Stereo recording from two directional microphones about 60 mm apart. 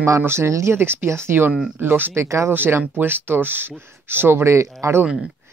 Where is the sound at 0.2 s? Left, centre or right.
Right.